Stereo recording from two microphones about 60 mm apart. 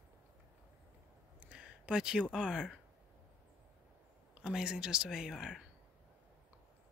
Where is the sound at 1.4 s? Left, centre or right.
Centre.